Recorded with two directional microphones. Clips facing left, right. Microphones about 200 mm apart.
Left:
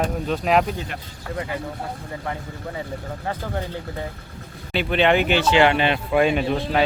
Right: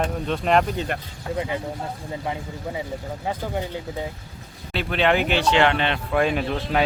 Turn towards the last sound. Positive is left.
turn(degrees=0)  # may be behind; listen again after turning